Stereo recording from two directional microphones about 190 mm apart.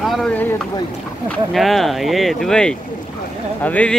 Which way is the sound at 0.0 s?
Centre (ahead or behind).